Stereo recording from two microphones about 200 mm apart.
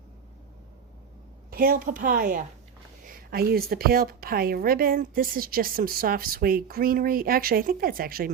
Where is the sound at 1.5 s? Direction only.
50° right (ahead or behind).